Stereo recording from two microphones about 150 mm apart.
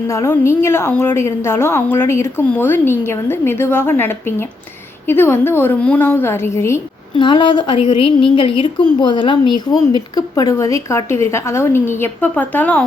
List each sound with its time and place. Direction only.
0.1 s a woman's voice: 20° left (ahead or behind)
7.2 s a woman's voice: 30° left (ahead or behind); by 12.8 s 10° left (ahead or behind)